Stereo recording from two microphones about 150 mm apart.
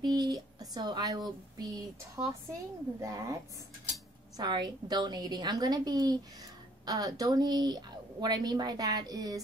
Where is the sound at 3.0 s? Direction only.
20° right (ahead or behind).